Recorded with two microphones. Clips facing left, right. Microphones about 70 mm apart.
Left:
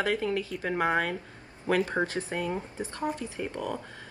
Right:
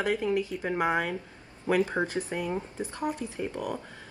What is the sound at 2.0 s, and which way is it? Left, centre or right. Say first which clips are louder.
Speech: even; left.